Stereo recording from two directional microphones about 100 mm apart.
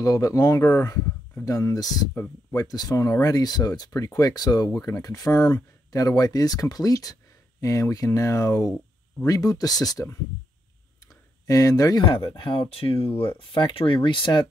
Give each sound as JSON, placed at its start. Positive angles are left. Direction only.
{"t": 0.0, "sound": "speech", "side_deg": 35}
{"t": 11.0, "sound": "a sound", "side_deg": 35}
{"t": 12.0, "sound": "speech", "side_deg": 60}
{"t": 13.2, "sound": "speech", "side_deg": 60}